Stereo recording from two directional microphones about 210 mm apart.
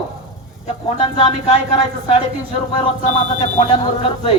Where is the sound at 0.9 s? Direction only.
25° left (ahead or behind).